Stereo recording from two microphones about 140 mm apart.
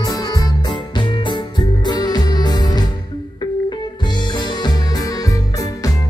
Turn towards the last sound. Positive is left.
turn(degrees=25)  # may be behind; listen again after turning